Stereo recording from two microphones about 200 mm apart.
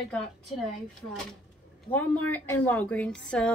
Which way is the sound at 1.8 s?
10° left (ahead or behind).